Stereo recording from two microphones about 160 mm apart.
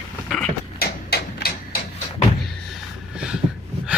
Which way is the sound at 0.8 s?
75° left (ahead or behind).